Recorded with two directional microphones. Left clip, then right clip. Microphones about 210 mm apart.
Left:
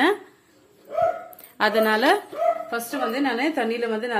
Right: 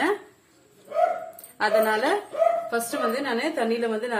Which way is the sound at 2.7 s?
30° left (ahead or behind).